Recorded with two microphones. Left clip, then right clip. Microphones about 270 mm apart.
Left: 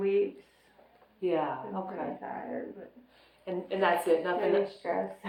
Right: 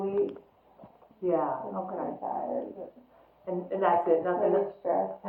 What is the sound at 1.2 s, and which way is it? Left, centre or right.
Speech, left.